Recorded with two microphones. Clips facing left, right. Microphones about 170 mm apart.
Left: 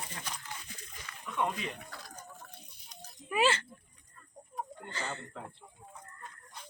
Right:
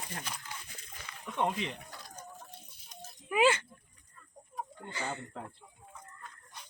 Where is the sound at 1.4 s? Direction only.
25° right (ahead or behind).